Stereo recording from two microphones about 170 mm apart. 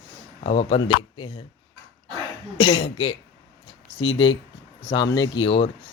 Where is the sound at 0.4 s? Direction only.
35° left (ahead or behind).